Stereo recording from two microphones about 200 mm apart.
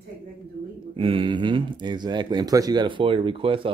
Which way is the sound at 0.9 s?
25° right (ahead or behind).